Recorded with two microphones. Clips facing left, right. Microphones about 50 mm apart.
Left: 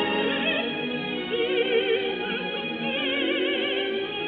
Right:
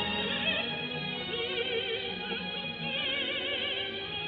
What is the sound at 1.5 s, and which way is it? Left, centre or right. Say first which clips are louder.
Music: left 12 dB; left.